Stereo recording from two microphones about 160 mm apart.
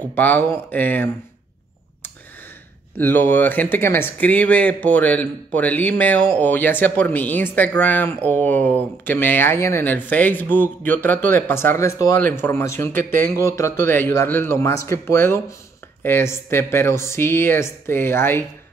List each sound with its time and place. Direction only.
0.1 s speech: 10° left (ahead or behind)
3.0 s speech: 10° left (ahead or behind)